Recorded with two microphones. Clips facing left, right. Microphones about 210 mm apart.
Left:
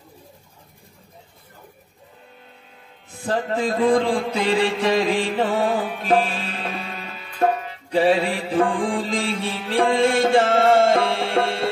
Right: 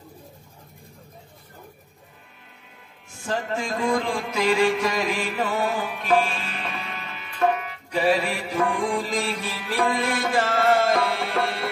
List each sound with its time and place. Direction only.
3.1 s mantra: 35° left (ahead or behind)
7.3 s music: 30° left (ahead or behind)